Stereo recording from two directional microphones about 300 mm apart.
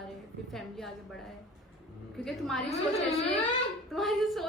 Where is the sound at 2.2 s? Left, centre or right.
Centre.